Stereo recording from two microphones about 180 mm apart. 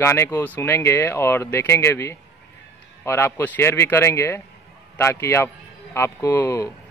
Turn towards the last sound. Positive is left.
turn(degrees=15)  # may be behind; listen again after turning